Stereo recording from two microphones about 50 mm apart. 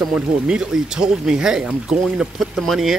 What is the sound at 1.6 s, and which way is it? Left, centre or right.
Speech, right.